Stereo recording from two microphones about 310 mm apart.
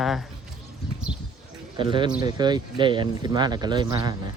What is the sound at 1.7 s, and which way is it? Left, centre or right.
Speech, centre.